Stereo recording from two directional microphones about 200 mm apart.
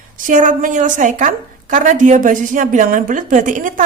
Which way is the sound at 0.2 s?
40° right (ahead or behind).